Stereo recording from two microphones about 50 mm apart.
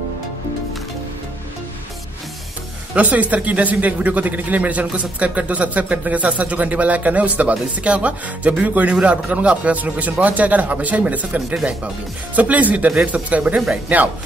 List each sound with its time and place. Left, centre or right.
3.0 s speech: right